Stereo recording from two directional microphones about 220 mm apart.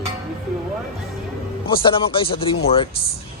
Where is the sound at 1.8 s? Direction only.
25° left (ahead or behind).